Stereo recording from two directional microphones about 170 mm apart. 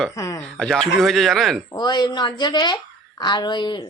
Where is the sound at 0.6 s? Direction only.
Centre (ahead or behind).